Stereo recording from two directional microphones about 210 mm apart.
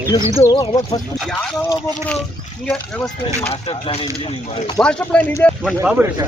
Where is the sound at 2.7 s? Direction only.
Centre (ahead or behind).